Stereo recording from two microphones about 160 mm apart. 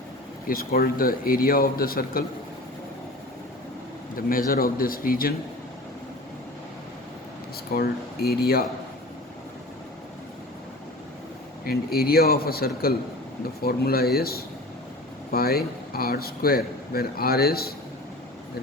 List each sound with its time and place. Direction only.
0.4 s a man's voice: 65° left (ahead or behind)
4.1 s a man's voice: 60° left (ahead or behind)
7.7 s speech: 75° left (ahead or behind)
11.6 s speech: 70° left (ahead or behind)